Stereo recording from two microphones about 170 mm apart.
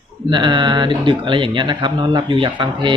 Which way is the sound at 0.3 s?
25° right (ahead or behind).